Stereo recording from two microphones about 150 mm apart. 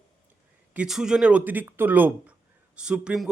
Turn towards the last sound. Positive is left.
turn(degrees=-5)  # may be behind; listen again after turning